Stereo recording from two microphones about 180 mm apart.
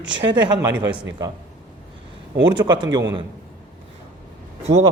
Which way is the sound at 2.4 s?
25° right (ahead or behind).